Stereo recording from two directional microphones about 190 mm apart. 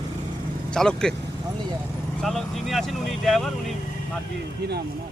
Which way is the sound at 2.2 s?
Centre (ahead or behind).